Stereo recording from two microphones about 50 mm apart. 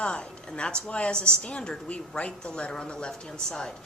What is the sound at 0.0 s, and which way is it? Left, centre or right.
Speech, centre.